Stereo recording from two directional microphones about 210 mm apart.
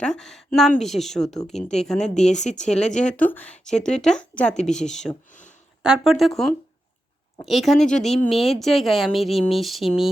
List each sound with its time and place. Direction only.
0.0 s speech: 5° left (ahead or behind)
2.1 s speech: 35° left (ahead or behind)
2.6 s speech: 5° left (ahead or behind)
5.3 s a sound: 35° left (ahead or behind)
6.0 s speech: centre (ahead or behind)